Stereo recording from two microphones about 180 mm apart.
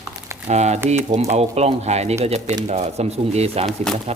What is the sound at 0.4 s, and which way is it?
Speech, 40° right (ahead or behind).